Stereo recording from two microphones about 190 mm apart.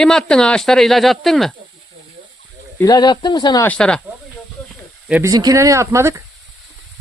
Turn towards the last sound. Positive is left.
turn(degrees=-15)  # may be behind; listen again after turning